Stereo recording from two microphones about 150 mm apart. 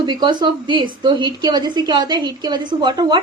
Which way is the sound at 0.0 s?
30° right (ahead or behind).